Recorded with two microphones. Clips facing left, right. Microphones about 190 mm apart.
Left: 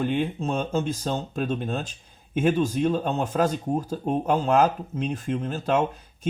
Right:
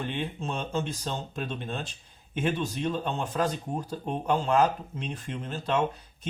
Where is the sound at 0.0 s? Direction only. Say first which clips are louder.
Left 8 dB; 40° left (ahead or behind).